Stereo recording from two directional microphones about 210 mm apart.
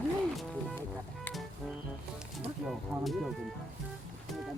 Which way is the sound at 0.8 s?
5° left (ahead or behind).